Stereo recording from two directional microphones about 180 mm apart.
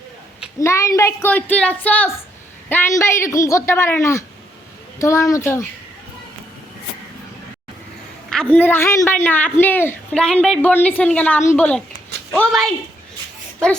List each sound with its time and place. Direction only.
0.6 s a woman's voice: 15° left (ahead or behind)
8.3 s a woman's voice: 5° left (ahead or behind)